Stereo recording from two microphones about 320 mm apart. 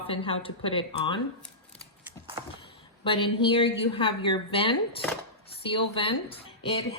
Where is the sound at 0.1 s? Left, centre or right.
Centre.